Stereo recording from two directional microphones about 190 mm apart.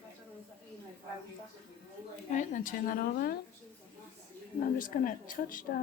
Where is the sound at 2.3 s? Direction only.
40° left (ahead or behind).